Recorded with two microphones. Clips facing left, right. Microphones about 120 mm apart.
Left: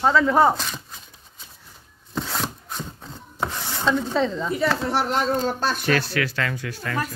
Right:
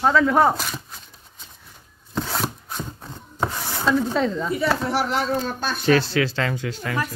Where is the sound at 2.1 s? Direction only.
Centre (ahead or behind).